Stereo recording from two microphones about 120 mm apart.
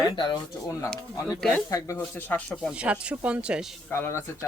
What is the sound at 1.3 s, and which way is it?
Speech, centre (ahead or behind).